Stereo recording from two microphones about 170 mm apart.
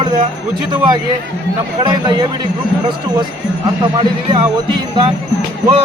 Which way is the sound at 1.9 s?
25° right (ahead or behind).